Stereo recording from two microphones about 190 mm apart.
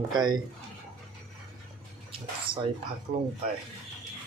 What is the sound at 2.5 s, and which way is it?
Dishes, 25° right (ahead or behind).